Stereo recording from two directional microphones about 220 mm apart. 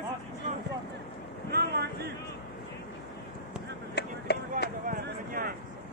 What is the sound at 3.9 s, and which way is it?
Vehicle, 50° left (ahead or behind).